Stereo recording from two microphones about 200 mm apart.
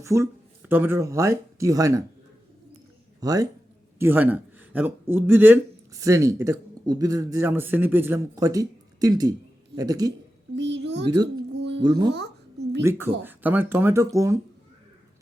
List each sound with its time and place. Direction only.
0.0 s a man's voice: 15° right (ahead or behind)
3.2 s a man's voice: 15° right (ahead or behind)
10.5 s a sound: 60° right (ahead or behind)
11.1 s speech: 20° right (ahead or behind)
11.5 s a sound: 60° right (ahead or behind)
11.8 s speech: 20° right (ahead or behind)
12.0 s a child's voice: 55° right (ahead or behind)
12.8 s a man's voice: 10° right (ahead or behind)